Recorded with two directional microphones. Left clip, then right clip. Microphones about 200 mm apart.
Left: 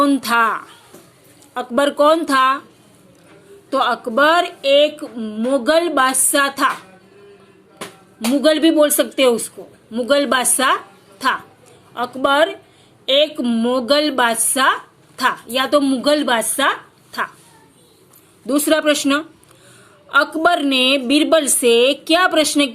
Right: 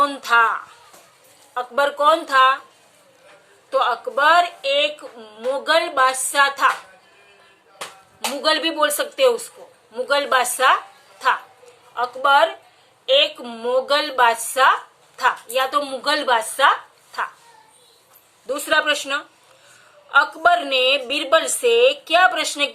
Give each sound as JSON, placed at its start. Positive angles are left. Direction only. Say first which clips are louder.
{"t": 0.0, "sound": "a woman's voice", "louder": "left 1 dB", "side_deg": 30}
{"t": 3.7, "sound": "a woman's voice", "louder": "left 2 dB", "side_deg": 35}
{"t": 8.4, "sound": "a woman's voice", "louder": "left 5 dB", "side_deg": 30}
{"t": 11.9, "sound": "a woman's voice", "louder": "even", "side_deg": 35}
{"t": 18.4, "sound": "a woman's voice", "louder": "left 3 dB", "side_deg": 35}